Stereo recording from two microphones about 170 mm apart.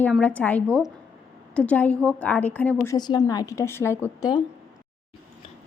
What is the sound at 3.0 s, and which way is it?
A woman's voice, 25° left (ahead or behind).